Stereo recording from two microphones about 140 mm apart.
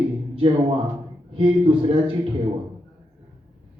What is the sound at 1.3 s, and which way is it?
Speech, 40° right (ahead or behind).